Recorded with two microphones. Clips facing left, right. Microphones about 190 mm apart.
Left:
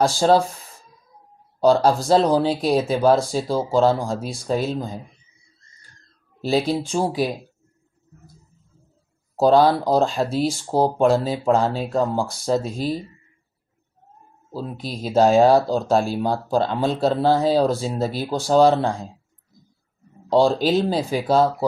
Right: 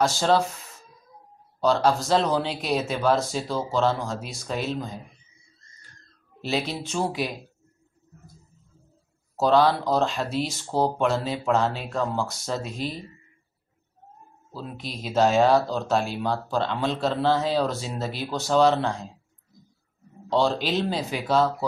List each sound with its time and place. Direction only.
0.0 s speech: 35° left (ahead or behind)
1.6 s speech: 35° left (ahead or behind)
6.7 s speech: 30° left (ahead or behind)
9.4 s speech: 40° left (ahead or behind)
14.5 s speech: 35° left (ahead or behind)
20.2 s speech: 35° left (ahead or behind)